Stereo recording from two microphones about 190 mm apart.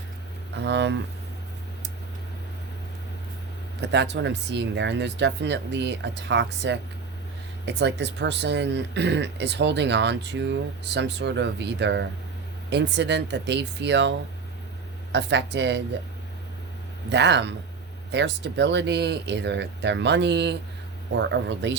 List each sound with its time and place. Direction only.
0.5 s speech: 65° right (ahead or behind)
3.8 s speech: 65° right (ahead or behind)
15.1 s speech: 65° right (ahead or behind)
17.1 s speech: 65° right (ahead or behind)